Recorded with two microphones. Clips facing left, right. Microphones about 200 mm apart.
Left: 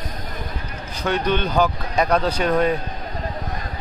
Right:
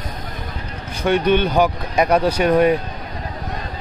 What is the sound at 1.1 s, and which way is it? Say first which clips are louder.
Speech: right 5 dB; 15° right (ahead or behind).